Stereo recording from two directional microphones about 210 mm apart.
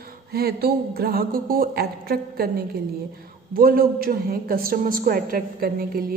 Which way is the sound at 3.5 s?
45° right (ahead or behind).